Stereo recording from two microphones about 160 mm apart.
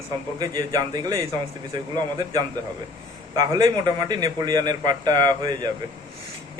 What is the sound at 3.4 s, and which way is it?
A man's voice, 25° right (ahead or behind).